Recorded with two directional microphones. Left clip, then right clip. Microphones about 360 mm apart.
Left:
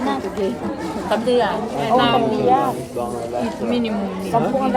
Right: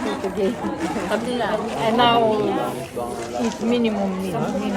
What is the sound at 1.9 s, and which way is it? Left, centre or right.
Speech, centre.